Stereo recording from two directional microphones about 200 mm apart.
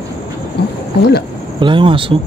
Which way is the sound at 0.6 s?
55° left (ahead or behind).